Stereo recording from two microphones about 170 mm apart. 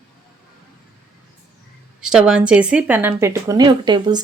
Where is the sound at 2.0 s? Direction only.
5° right (ahead or behind).